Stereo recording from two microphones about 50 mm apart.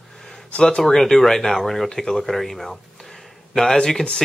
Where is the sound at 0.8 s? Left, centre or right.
Centre.